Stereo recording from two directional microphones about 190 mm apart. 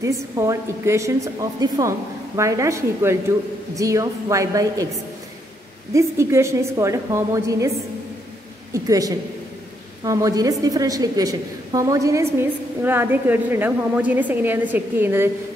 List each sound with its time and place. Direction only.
0.0 s a woman's voice: 15° right (ahead or behind)
5.9 s a woman's voice: 15° right (ahead or behind)
8.7 s a woman's voice: 20° right (ahead or behind)